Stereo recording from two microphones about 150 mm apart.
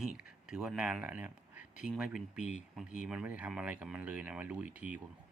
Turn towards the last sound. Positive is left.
turn(degrees=-10)  # may be behind; listen again after turning